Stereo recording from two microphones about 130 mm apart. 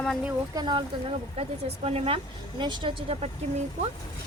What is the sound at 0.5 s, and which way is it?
Speech, 40° right (ahead or behind).